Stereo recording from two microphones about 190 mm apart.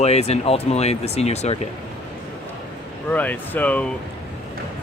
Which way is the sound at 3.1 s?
10° left (ahead or behind).